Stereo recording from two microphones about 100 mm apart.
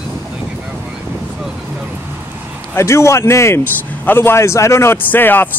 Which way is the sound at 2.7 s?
30° left (ahead or behind).